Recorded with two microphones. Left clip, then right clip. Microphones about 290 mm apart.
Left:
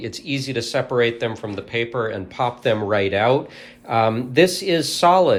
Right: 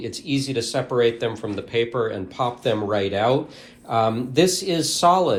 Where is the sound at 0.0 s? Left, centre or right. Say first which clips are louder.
Even; left.